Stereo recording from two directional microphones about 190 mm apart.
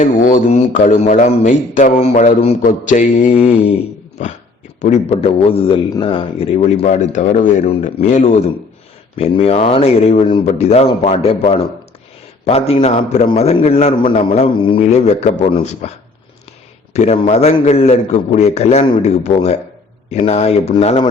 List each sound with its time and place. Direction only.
0.0 s a man's voice: 40° left (ahead or behind)
16.9 s a man's voice: 35° left (ahead or behind)